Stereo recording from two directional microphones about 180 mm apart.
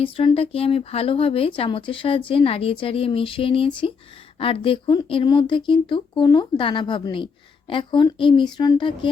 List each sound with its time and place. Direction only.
0.0 s speech: 30° left (ahead or behind)